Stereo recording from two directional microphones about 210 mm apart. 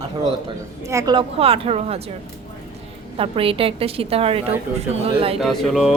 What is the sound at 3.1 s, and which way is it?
A woman's voice, 25° right (ahead or behind).